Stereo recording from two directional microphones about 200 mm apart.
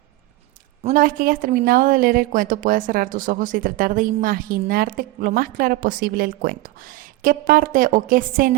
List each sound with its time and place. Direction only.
0.9 s a woman's voice: 45° right (ahead or behind)